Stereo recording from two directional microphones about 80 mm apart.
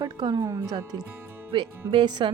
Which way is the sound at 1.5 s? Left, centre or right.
Right.